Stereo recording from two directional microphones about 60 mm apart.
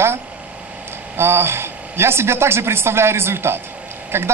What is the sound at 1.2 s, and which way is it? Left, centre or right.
A man's voice, right.